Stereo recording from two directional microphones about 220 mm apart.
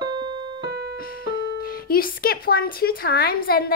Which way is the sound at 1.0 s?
40° left (ahead or behind).